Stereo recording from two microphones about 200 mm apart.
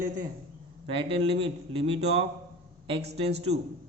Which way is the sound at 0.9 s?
25° right (ahead or behind).